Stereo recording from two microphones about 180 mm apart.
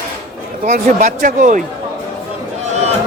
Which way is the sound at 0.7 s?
45° right (ahead or behind).